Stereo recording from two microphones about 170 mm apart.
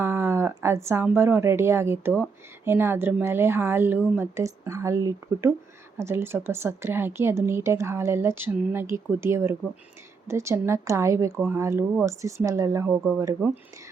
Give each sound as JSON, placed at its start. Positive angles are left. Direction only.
{"t": 0.0, "sound": "a woman's voice", "side_deg": -15}